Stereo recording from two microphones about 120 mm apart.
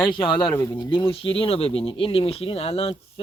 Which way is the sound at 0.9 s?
45° left (ahead or behind).